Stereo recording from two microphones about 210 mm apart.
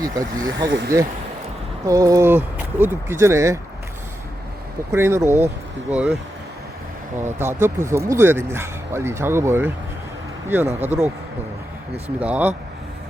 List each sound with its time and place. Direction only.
0.0 s speech: 15° right (ahead or behind)
1.8 s speech: 15° right (ahead or behind)
4.9 s speech: 10° right (ahead or behind)
7.2 s speech: 10° right (ahead or behind)